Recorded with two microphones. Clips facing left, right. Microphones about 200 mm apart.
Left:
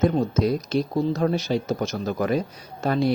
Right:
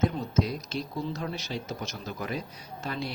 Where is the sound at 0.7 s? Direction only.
55° left (ahead or behind).